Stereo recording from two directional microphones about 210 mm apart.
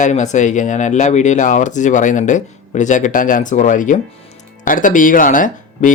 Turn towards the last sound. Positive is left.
turn(degrees=40)  # may be behind; listen again after turning